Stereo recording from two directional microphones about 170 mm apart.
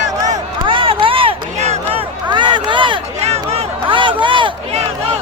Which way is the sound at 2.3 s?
25° right (ahead or behind).